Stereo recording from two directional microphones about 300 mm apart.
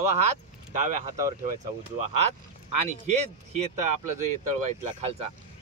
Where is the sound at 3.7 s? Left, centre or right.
Right.